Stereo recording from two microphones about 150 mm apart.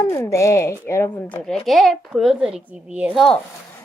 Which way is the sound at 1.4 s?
Centre (ahead or behind).